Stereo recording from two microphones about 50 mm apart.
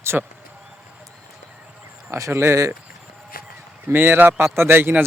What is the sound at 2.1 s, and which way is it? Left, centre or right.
Speech, right.